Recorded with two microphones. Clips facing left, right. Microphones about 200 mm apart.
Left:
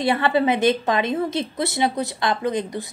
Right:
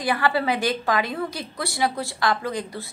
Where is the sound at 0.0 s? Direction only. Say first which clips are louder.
Left 4 dB; 25° left (ahead or behind).